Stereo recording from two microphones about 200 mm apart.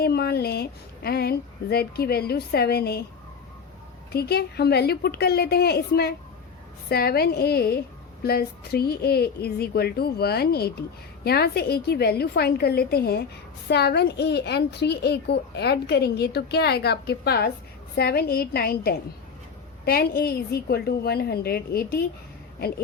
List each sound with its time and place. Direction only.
0.0 s a woman's voice: 50° left (ahead or behind)
4.1 s a woman's voice: 50° left (ahead or behind)